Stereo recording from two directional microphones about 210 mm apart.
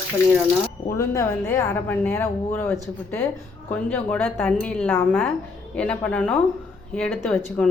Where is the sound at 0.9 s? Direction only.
15° left (ahead or behind).